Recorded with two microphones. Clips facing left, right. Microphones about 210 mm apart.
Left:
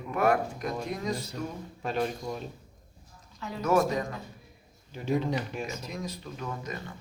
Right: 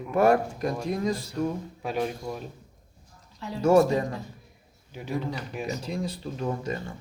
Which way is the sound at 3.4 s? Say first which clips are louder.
Right 6 dB; 30° right (ahead or behind).